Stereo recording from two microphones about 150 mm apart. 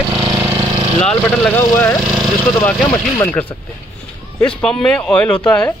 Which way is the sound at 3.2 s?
10° left (ahead or behind).